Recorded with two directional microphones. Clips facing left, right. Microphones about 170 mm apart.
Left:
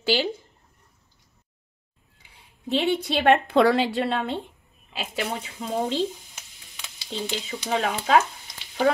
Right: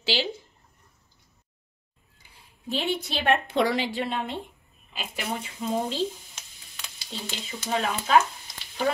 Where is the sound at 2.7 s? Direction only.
60° left (ahead or behind).